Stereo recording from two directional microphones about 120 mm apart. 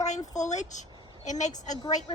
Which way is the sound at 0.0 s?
80° left.